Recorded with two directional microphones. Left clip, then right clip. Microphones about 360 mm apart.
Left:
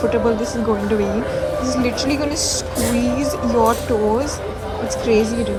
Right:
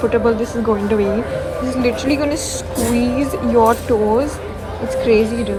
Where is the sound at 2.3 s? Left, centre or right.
Left.